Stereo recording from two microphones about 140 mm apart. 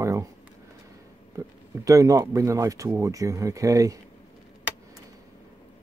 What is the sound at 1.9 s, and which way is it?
Speech, 25° right (ahead or behind).